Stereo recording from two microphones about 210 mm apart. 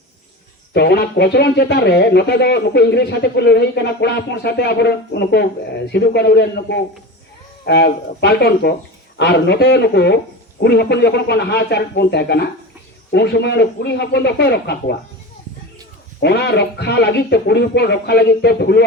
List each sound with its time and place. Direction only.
0.7 s speech: 50° left (ahead or behind)
16.2 s speech: 50° left (ahead or behind)